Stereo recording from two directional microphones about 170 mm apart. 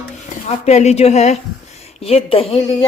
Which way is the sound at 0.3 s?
40° left (ahead or behind).